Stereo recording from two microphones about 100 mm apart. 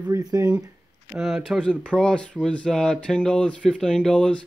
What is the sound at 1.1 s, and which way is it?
Speech, 5° right (ahead or behind).